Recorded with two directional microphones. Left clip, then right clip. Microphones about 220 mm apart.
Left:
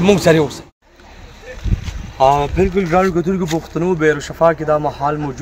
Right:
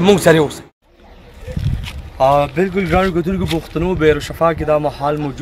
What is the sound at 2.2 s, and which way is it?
Speech, 40° right (ahead or behind).